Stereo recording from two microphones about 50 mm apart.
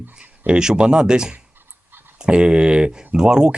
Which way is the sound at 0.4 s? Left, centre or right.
Centre.